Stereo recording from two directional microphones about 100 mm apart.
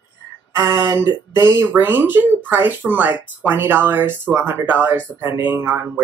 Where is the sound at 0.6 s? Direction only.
25° right (ahead or behind).